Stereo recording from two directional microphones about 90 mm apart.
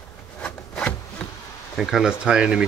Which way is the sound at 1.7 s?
5° right (ahead or behind).